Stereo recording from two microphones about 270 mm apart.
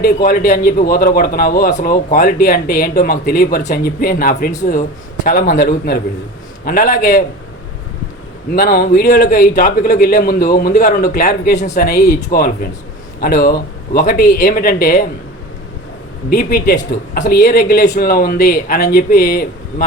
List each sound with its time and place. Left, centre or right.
0.0 s a man's voice: left
8.5 s a man's voice: left
16.3 s a man's voice: left